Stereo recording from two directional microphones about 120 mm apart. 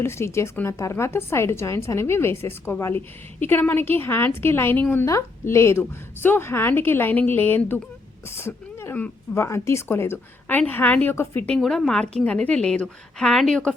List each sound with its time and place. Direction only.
0.0 s a woman's voice: 20° left (ahead or behind)
11.4 s a woman's voice: 5° left (ahead or behind)